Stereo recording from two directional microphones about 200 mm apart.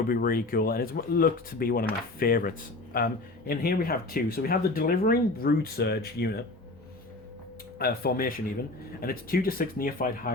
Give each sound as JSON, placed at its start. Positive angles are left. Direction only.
{"t": 0.1, "sound": "speech", "side_deg": 45}
{"t": 7.8, "sound": "speech", "side_deg": 50}